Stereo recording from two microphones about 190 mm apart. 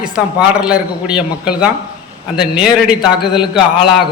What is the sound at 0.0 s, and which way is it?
A man's voice, 5° right (ahead or behind).